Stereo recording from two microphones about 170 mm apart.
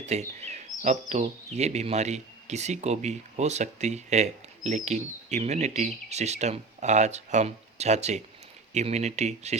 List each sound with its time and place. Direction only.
0.1 s speech: 40° right (ahead or behind)
1.5 s speech: 40° right (ahead or behind)